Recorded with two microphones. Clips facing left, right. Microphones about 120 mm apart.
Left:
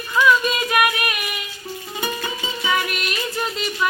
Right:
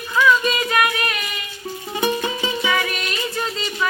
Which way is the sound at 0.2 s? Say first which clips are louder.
Even; 10° left (ahead or behind).